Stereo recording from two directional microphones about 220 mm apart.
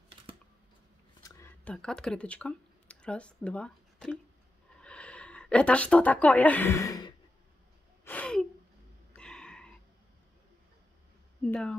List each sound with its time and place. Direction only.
1.2 s a woman's voice: 15° left (ahead or behind)
8.0 s gasp: 5° left (ahead or behind)
9.1 s a sound: 5° left (ahead or behind)
11.4 s speech: 5° left (ahead or behind)